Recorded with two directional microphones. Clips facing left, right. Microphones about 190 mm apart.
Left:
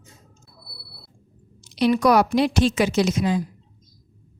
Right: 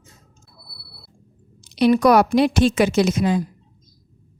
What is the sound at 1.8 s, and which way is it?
A woman's voice, 50° right (ahead or behind).